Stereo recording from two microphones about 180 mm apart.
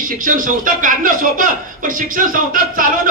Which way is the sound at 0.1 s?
50° right (ahead or behind).